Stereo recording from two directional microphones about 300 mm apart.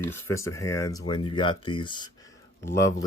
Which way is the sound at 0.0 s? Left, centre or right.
Centre.